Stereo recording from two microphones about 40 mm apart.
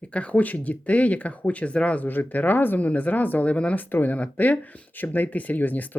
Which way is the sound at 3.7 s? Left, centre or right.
Left.